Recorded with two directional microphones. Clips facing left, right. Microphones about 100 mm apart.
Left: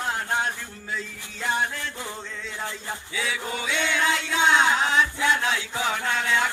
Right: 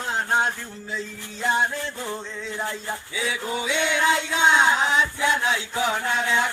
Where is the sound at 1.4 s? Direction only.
20° right (ahead or behind).